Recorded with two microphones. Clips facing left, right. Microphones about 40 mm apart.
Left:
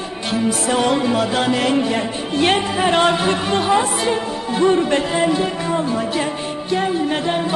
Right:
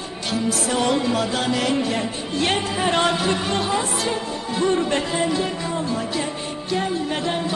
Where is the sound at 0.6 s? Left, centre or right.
Centre.